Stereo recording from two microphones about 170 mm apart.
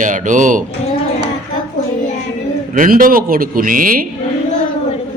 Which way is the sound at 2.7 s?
50° right (ahead or behind).